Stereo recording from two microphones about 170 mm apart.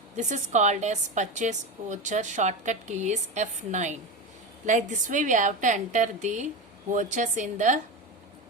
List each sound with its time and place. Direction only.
0.2 s a woman's voice: 45° right (ahead or behind)